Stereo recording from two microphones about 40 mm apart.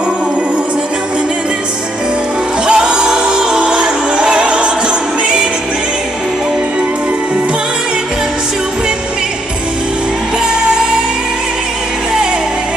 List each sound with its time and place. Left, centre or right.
2.6 s music: right